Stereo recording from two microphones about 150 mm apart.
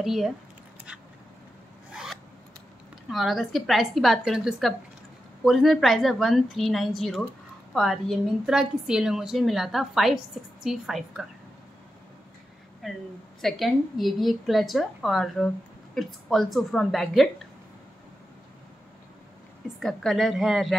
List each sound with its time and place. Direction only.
0.0 s a woman's voice: centre (ahead or behind)
3.1 s a woman's voice: centre (ahead or behind)
12.8 s a woman's voice: centre (ahead or behind)
19.8 s a woman's voice: centre (ahead or behind)